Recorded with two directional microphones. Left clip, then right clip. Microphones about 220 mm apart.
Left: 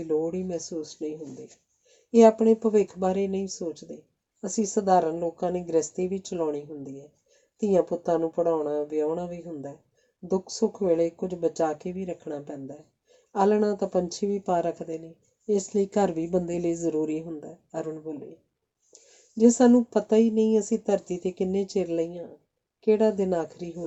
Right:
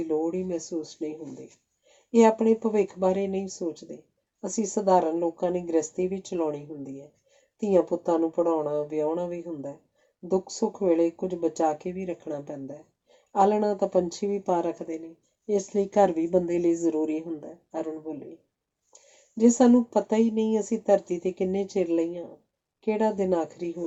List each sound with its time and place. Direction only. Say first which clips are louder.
0.3 s speech: right 1 dB; 45° left (ahead or behind)
2.1 s speech: left 2 dB; 45° left (ahead or behind)
19.4 s speech: left 1 dB; 45° left (ahead or behind)